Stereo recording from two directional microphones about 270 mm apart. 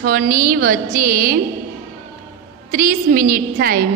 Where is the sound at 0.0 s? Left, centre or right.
Right.